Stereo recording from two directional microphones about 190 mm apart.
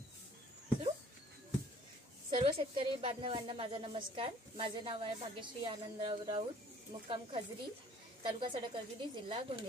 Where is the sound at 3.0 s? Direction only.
25° right (ahead or behind).